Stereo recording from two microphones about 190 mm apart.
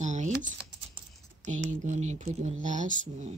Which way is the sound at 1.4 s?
40° right (ahead or behind).